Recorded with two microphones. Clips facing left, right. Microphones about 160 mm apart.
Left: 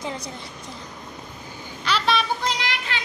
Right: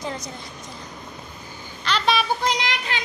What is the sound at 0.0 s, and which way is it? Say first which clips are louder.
Speech: even; 25° left (ahead or behind).